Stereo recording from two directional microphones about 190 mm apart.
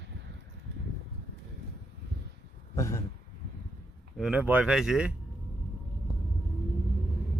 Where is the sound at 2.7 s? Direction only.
15° left (ahead or behind).